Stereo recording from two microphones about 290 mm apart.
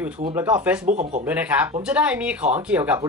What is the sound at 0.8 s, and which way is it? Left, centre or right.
Speech, right.